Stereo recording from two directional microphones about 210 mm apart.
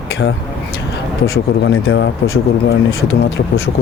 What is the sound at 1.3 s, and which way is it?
Speech, 60° left (ahead or behind).